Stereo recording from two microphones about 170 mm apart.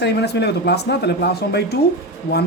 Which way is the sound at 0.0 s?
80° left.